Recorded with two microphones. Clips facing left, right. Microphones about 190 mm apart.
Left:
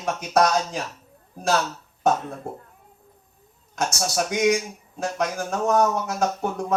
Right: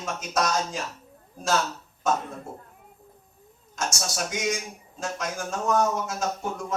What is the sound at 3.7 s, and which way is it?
Speech, 60° left (ahead or behind).